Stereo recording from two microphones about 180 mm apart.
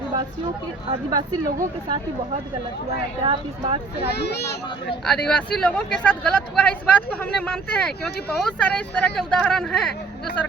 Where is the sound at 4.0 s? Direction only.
65° left (ahead or behind).